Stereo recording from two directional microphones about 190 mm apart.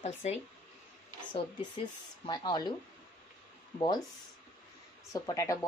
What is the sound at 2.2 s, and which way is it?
Speech, 20° left (ahead or behind).